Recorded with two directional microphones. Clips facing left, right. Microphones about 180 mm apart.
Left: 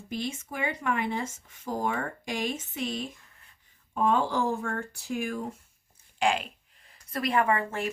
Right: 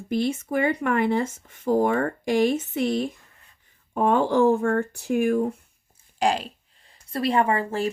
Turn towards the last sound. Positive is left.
turn(degrees=-30)  # may be behind; listen again after turning